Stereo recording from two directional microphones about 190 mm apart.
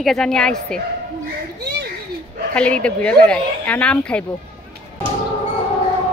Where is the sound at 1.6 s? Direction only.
60° right (ahead or behind).